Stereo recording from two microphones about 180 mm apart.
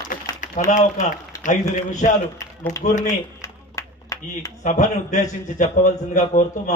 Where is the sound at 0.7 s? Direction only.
45° left (ahead or behind).